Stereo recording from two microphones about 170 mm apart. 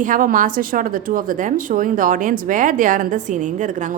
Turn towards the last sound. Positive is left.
turn(degrees=-50)  # may be behind; listen again after turning